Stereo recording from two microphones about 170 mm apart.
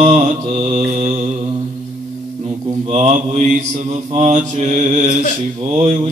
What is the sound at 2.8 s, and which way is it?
Mantra, 40° right (ahead or behind).